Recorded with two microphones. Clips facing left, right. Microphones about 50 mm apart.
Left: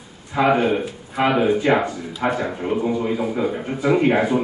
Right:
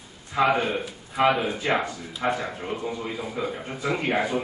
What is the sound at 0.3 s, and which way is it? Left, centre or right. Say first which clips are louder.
A man's voice: left 5 dB; centre.